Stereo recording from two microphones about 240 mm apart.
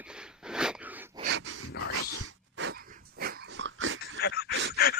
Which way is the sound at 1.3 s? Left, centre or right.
Right.